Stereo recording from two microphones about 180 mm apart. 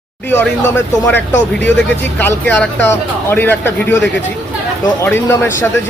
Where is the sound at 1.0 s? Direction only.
10° left (ahead or behind).